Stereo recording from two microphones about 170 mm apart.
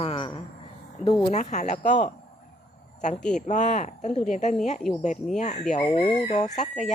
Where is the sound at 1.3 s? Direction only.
45° left (ahead or behind).